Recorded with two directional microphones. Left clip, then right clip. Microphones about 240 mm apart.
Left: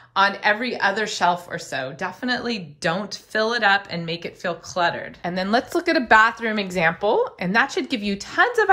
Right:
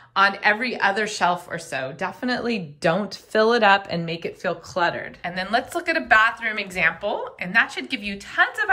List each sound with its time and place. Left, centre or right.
0.1 s a woman's voice: centre
5.2 s speech: centre